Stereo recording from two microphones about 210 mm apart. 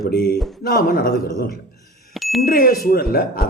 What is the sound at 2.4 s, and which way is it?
A man's voice, 45° left (ahead or behind).